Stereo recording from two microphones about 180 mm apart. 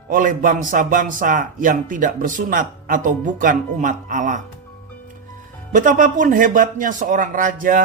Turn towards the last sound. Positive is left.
turn(degrees=-50)  # may be behind; listen again after turning